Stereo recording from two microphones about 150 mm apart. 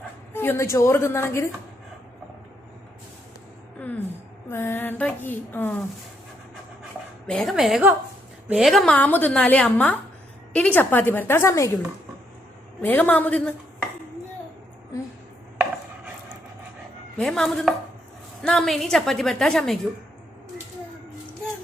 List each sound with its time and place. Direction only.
0.3 s a woman's voice: 15° left (ahead or behind)
4.4 s a woman's voice: 15° left (ahead or behind)
7.3 s a woman's voice: 5° left (ahead or behind)
12.8 s a woman's voice: 10° left (ahead or behind)
17.2 s a woman's voice: 5° left (ahead or behind)